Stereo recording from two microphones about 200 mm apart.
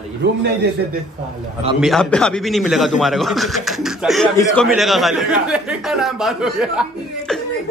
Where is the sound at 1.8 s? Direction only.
Centre (ahead or behind).